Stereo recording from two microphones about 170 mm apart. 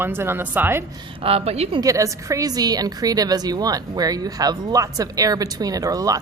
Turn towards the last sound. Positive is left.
turn(degrees=-20)  # may be behind; listen again after turning